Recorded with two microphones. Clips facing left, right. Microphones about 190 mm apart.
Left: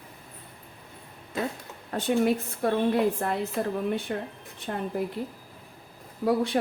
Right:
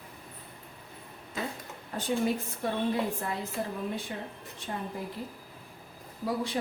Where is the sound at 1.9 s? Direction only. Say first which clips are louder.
Left 5 dB; 65° left (ahead or behind).